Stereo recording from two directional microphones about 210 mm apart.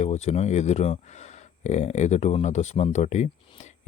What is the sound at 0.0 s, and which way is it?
Speech, 35° left (ahead or behind).